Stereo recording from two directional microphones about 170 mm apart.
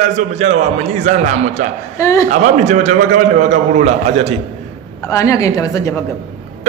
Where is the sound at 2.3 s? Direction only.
45° right (ahead or behind).